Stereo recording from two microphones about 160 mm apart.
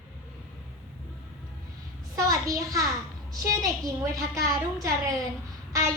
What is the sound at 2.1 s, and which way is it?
A woman's voice, 20° right (ahead or behind).